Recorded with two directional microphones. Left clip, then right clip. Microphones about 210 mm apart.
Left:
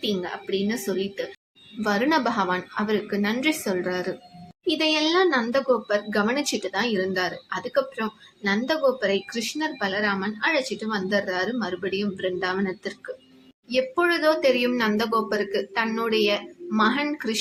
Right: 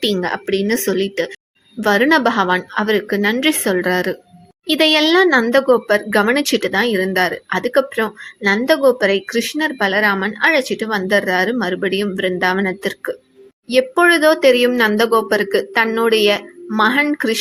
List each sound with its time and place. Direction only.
0.0 s speech: 45° right (ahead or behind)